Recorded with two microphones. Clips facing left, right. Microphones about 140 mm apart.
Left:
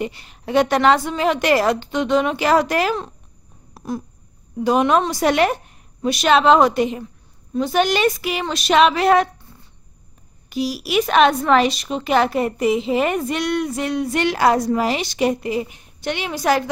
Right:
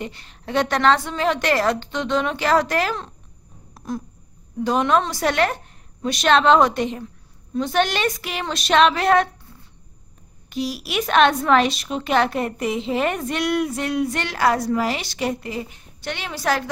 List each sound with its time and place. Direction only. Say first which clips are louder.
0.0 s a woman's voice: left 5 dB; 10° left (ahead or behind)
3.7 s a sound: left 2 dB; 5° left (ahead or behind)
4.6 s a woman's voice: left 3 dB; 10° left (ahead or behind)
10.5 s a woman's voice: left 5 dB; centre (ahead or behind)
14.1 s a woman's voice: left 4 dB; 15° left (ahead or behind)